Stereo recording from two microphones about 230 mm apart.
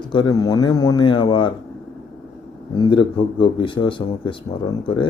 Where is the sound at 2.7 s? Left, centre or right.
Left.